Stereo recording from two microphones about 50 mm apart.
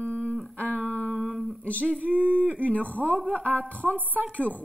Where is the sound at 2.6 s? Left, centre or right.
Left.